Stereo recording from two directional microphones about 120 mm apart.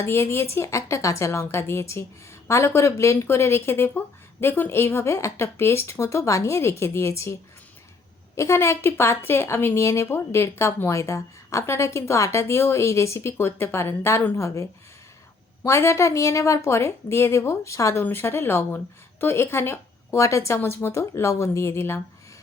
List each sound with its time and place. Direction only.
0.0 s a woman's voice: 20° left (ahead or behind)
8.4 s a woman's voice: 20° left (ahead or behind)